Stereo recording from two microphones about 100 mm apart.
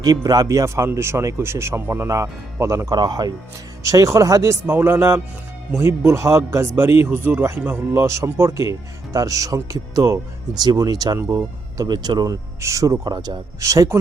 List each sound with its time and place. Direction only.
0.0 s speech: 40° right (ahead or behind)
2.9 s speech: 45° right (ahead or behind)
3.8 s speech: 30° right (ahead or behind)
4.6 s a man's voice: 20° right (ahead or behind); by 11.2 s 40° right (ahead or behind)
11.2 s a man's voice: 25° right (ahead or behind)
11.8 s speech: 45° right (ahead or behind)
12.5 s speech: 30° right (ahead or behind)
13.6 s speech: 30° right (ahead or behind)